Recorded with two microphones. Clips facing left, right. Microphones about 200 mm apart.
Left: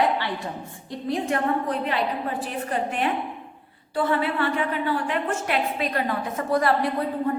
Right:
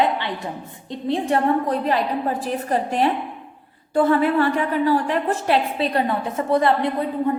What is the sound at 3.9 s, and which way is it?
A woman's voice, 45° right (ahead or behind).